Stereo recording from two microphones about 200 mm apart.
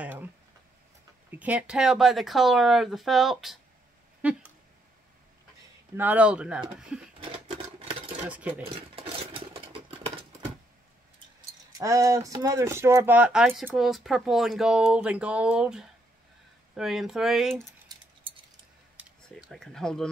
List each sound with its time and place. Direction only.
0.0 s a sound: 10° right (ahead or behind)
1.3 s speech: 10° right (ahead or behind)
4.2 s a sound: 5° right (ahead or behind)
5.9 s speech: 10° right (ahead or behind)
8.3 s speech: 5° right (ahead or behind)
8.9 s engine: 25° right (ahead or behind)
11.8 s speech: 15° right (ahead or behind)
19.5 s speech: centre (ahead or behind)